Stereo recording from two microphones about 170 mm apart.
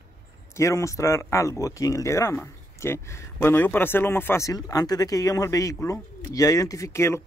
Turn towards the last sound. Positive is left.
turn(degrees=15)  # may be behind; listen again after turning